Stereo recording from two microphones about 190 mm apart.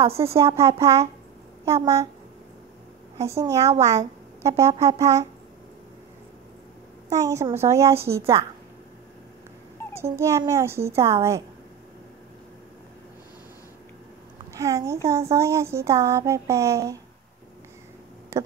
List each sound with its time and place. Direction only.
0.2 s speech: 20° right (ahead or behind)
3.2 s speech: 15° right (ahead or behind)
7.1 s speech: 15° right (ahead or behind)
9.9 s speech: 15° right (ahead or behind)
14.5 s speech: 15° right (ahead or behind)
18.3 s speech: 15° right (ahead or behind)